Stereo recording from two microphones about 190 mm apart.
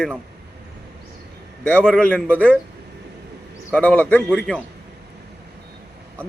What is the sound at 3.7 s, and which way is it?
Speech, 10° left (ahead or behind).